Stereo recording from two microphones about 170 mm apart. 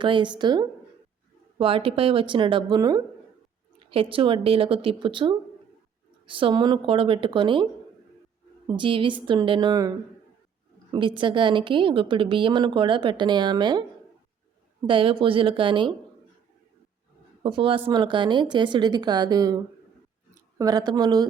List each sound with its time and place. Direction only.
0.0 s a woman's voice: 30° right (ahead or behind)
11.2 s a woman's voice: 30° right (ahead or behind)
14.8 s speech: 30° right (ahead or behind)
17.4 s a woman's voice: 30° right (ahead or behind)